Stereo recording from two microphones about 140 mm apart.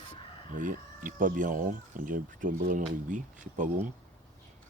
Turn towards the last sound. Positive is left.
turn(degrees=-65)  # may be behind; listen again after turning